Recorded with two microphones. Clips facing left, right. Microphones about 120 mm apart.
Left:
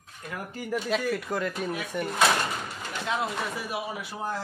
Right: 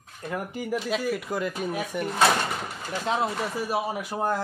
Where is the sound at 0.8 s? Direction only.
Centre (ahead or behind).